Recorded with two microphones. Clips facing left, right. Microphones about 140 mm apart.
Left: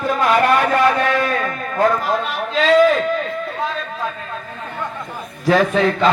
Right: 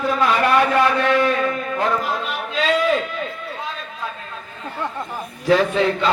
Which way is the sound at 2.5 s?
40° left (ahead or behind).